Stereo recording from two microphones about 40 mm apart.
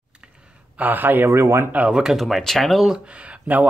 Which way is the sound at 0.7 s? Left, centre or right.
Right.